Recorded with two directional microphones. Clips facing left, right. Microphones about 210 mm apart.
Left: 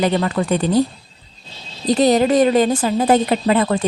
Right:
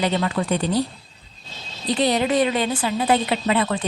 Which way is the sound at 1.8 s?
45° left (ahead or behind).